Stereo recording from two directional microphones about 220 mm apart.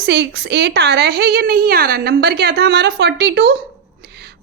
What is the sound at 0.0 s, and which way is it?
A woman's voice, 50° right (ahead or behind).